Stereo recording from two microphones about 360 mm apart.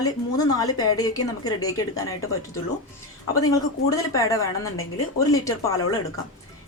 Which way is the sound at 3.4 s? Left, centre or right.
Centre.